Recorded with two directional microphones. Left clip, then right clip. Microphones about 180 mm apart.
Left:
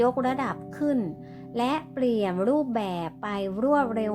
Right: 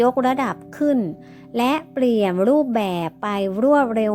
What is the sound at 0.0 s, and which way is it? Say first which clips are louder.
A woman's voice: right 6 dB; 40° right (ahead or behind).